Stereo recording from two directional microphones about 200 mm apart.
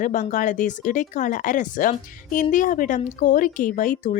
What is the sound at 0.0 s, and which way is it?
Speech, 40° left (ahead or behind).